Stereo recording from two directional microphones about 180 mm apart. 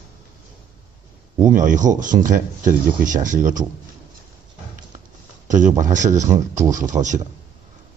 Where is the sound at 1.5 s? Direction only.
45° right (ahead or behind).